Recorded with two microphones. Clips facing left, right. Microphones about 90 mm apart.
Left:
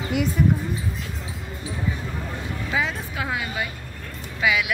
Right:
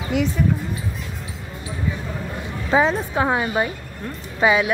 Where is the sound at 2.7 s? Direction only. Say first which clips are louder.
Right 9 dB; 35° right (ahead or behind).